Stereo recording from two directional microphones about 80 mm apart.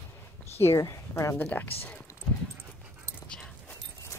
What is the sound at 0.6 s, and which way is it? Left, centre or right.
Speech, left.